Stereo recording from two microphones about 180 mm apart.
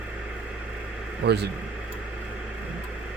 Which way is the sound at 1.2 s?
70° right (ahead or behind).